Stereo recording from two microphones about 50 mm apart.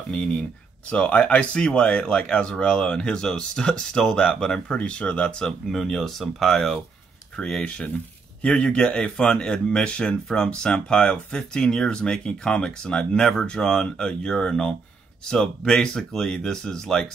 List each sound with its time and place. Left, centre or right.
0.1 s speech: left
5.7 s speech: centre
7.3 s speech: centre